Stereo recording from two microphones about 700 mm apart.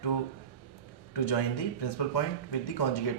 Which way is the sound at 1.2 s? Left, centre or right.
Left.